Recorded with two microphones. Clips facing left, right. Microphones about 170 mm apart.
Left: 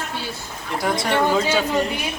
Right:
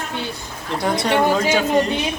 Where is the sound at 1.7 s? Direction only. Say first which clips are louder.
Right 4 dB; 25° right (ahead or behind).